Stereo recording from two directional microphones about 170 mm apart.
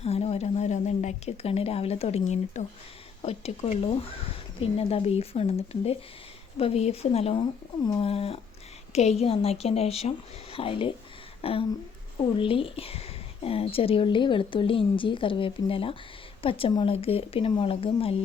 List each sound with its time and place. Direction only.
0.0 s speech: 35° left (ahead or behind)